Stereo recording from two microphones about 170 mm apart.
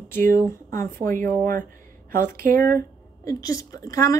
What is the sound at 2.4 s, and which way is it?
Speech, 55° right (ahead or behind).